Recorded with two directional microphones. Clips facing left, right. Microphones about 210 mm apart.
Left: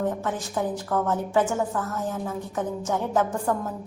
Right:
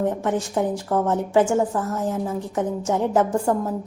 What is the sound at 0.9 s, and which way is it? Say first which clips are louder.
A woman's voice: right 4 dB; 25° right (ahead or behind).